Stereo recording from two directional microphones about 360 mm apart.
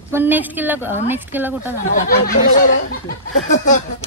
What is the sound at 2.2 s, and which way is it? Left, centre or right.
Speech, left.